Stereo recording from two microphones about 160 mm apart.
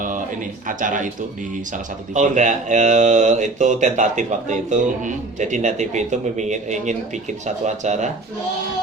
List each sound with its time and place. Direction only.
0.7 s speech: 55° right (ahead or behind)
2.1 s speech: 50° right (ahead or behind)